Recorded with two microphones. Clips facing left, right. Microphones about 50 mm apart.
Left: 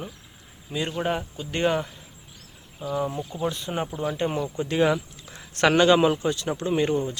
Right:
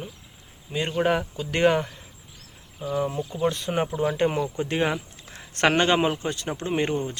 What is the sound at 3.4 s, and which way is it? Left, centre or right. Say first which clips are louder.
Speech: right 4 dB; right.